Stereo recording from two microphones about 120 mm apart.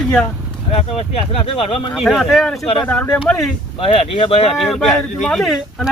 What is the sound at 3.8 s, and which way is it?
Speech, 50° left (ahead or behind).